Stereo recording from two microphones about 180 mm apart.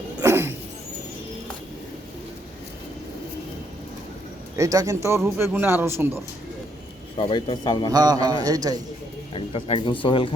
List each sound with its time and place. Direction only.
0.2 s a sound: 15° right (ahead or behind)
4.5 s a man's voice: 20° right (ahead or behind)
7.2 s speech: 25° left (ahead or behind)
7.9 s speech: 20° right (ahead or behind)
9.3 s speech: 30° left (ahead or behind)